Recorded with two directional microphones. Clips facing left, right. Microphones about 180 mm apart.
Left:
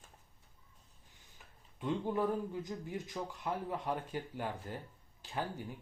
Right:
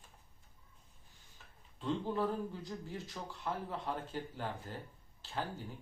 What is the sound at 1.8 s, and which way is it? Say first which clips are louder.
Speech: left 1 dB; 15° left (ahead or behind).